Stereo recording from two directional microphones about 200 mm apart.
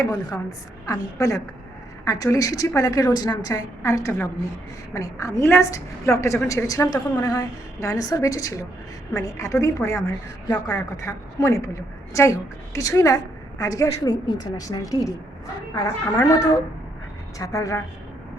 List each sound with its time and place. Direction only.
0.0 s a woman's voice: 20° left (ahead or behind)